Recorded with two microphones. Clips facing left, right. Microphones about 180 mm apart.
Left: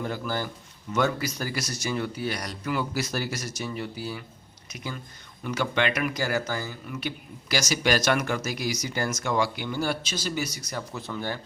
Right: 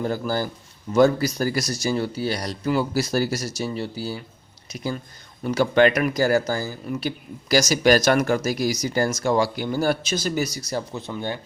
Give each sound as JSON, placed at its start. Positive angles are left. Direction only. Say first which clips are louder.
{"t": 0.0, "sound": "speech", "louder": "right 6 dB", "side_deg": -40}